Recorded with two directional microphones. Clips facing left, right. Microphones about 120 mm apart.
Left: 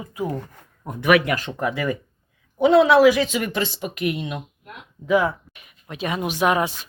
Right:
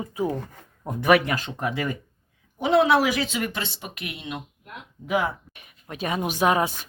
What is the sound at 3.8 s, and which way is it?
Speech, 50° left (ahead or behind).